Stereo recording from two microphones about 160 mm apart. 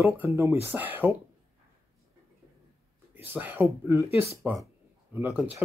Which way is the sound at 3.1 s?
15° right (ahead or behind).